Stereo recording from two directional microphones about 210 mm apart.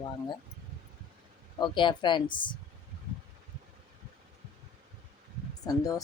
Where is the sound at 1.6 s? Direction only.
20° left (ahead or behind).